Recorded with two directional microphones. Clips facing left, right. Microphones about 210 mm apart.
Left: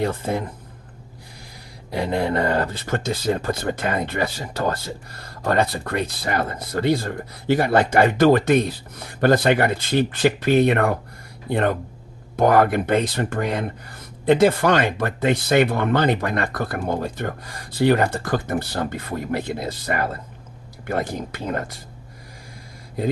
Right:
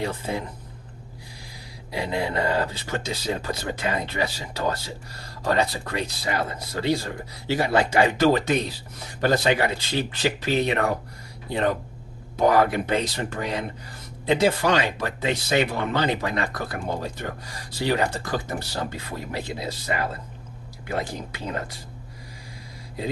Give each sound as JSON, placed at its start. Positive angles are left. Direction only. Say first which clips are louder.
{"t": 0.0, "sound": "speech", "louder": "left 5 dB", "side_deg": 55}
{"t": 1.9, "sound": "speech", "louder": "left 5 dB", "side_deg": 50}